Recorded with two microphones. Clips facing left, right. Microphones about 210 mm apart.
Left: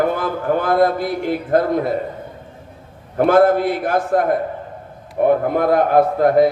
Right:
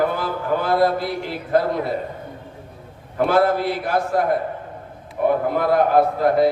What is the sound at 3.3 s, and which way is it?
A man's voice, 50° left (ahead or behind).